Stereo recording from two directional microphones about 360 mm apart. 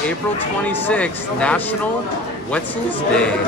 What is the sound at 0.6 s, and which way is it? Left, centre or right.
Speech, centre.